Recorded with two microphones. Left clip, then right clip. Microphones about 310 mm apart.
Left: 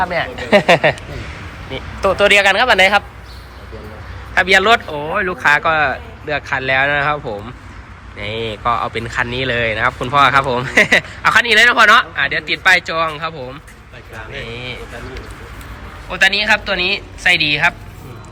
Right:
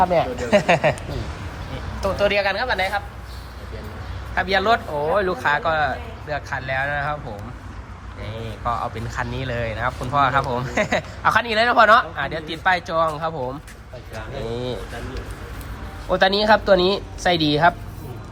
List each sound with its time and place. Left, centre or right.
0.0 s speech: centre
0.5 s speech: centre
2.0 s speech: centre
4.4 s speech: centre
8.2 s speech: centre
14.5 s vehicle: centre
16.0 s a man's voice: centre